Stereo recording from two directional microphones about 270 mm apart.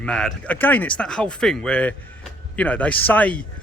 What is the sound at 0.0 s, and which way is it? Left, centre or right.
Speech, centre.